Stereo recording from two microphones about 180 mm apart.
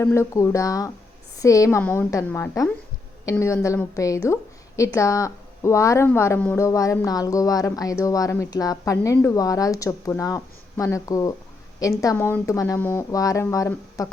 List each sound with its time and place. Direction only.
0.0 s speech: 15° left (ahead or behind)